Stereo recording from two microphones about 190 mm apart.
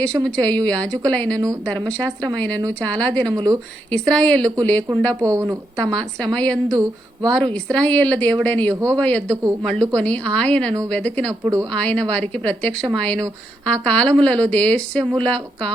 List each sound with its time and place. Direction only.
0.0 s speech: 5° left (ahead or behind)
3.3 s a sound: 20° right (ahead or behind)
3.9 s speech: 5° left (ahead or behind)
5.2 s a woman's voice: 15° right (ahead or behind)
5.7 s speech: 5° left (ahead or behind)
6.7 s a sound: 20° right (ahead or behind)
7.3 s speech: 5° left (ahead or behind)
8.7 s a woman's voice: 15° right (ahead or behind)
9.0 s speech: 5° left (ahead or behind)
11.4 s a woman's voice: 15° right (ahead or behind)
11.7 s speech: 5° left (ahead or behind)